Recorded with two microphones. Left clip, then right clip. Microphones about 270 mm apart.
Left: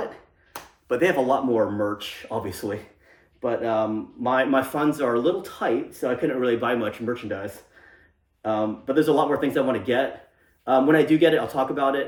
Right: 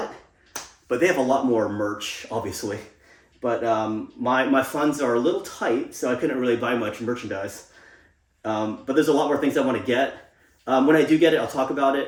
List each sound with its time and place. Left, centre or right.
0.9 s speech: centre
8.4 s speech: centre